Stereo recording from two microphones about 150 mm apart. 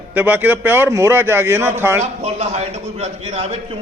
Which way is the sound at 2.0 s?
45° right (ahead or behind).